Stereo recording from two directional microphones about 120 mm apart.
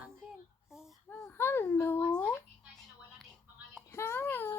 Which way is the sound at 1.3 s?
20° left (ahead or behind).